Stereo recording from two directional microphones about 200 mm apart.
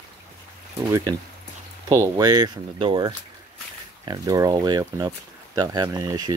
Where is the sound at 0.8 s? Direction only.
20° right (ahead or behind).